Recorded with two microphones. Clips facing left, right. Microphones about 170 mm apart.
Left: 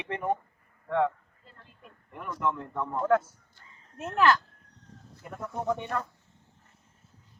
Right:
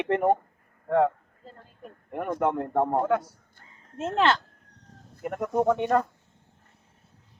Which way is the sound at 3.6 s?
55° right (ahead or behind).